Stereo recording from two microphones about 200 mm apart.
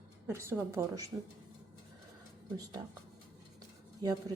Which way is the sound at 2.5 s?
20° right (ahead or behind).